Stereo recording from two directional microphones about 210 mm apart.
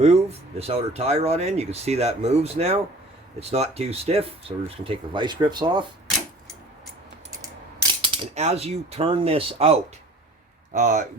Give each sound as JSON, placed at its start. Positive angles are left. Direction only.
{"t": 0.0, "sound": "speech", "side_deg": -30}
{"t": 7.3, "sound": "typing", "side_deg": -15}
{"t": 8.0, "sound": "speech", "side_deg": -25}